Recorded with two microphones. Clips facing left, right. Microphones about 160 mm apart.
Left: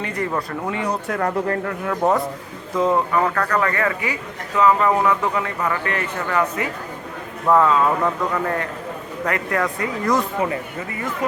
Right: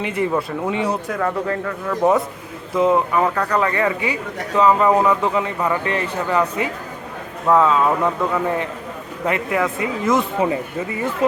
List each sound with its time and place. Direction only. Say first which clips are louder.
0.2 s speech: right 4 dB; 15° right (ahead or behind)
1.9 s speech: right 3 dB; centre (ahead or behind)
2.7 s speech: right 2 dB; 15° right (ahead or behind)
7.4 s speech: right 1 dB; 5° right (ahead or behind); by 11.3 s 25° right (ahead or behind)